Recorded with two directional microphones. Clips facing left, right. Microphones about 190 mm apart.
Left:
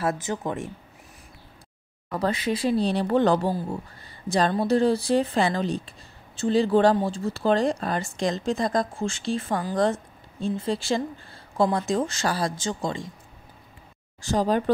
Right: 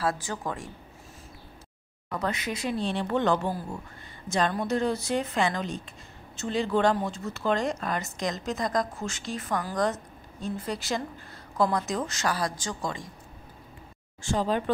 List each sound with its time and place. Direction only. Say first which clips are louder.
0.0 s speech: left 3 dB; 20° left (ahead or behind)
2.1 s speech: left 5 dB; 30° left (ahead or behind)
14.2 s speech: left 4 dB; 40° left (ahead or behind)